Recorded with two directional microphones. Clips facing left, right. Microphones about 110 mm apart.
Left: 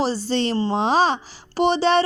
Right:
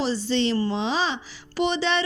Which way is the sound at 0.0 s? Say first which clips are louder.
Left 2 dB; 40° left (ahead or behind).